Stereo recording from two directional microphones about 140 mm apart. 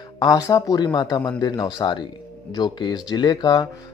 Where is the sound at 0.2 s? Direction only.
25° left (ahead or behind).